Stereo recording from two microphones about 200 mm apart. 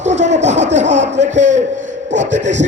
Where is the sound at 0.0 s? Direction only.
35° right (ahead or behind).